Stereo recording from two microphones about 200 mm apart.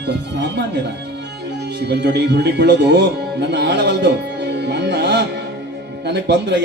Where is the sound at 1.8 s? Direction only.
60° right (ahead or behind).